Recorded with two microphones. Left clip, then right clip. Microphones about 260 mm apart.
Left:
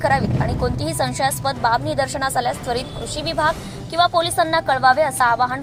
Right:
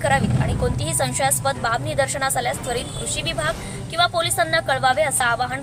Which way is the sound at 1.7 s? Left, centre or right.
Centre.